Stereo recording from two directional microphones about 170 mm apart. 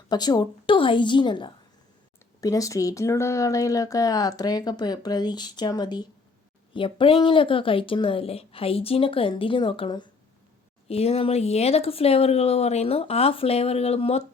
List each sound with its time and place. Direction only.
0.1 s speech: 25° left (ahead or behind)